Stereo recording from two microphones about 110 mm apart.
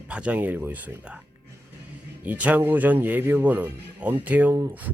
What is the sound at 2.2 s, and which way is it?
Speech, 15° right (ahead or behind).